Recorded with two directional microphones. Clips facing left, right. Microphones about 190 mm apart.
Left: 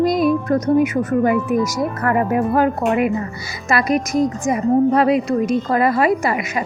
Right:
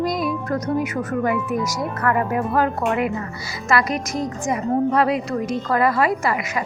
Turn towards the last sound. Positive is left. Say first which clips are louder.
# left 3 dB
turn(degrees=20)  # may be behind; listen again after turning